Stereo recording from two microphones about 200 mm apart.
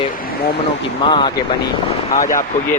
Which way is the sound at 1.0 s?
25° left (ahead or behind).